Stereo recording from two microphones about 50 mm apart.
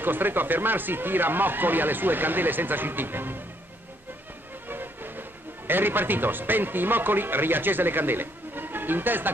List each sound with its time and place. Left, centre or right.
0.0 s speech: right
4.6 s train: right
5.7 s speech: right